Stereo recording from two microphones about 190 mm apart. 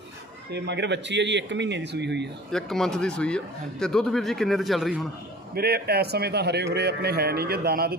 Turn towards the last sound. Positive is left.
turn(degrees=-55)  # may be behind; listen again after turning